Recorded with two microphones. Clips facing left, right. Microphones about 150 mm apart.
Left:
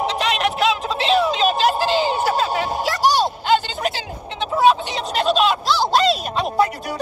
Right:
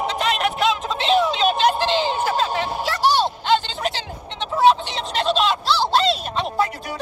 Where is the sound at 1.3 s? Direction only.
40° left (ahead or behind).